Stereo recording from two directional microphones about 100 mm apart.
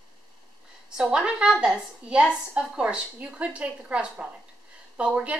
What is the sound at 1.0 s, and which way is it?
Speech, 10° right (ahead or behind).